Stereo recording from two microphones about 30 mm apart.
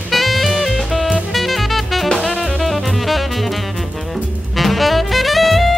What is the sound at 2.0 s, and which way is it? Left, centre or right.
Music, left.